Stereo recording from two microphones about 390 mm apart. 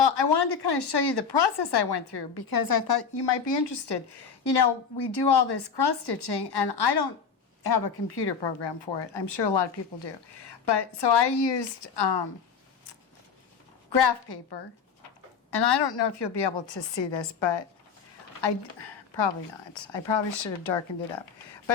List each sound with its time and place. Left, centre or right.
0.0 s speech: left
13.9 s speech: left